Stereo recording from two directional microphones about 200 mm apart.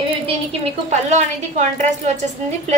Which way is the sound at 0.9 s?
35° right (ahead or behind).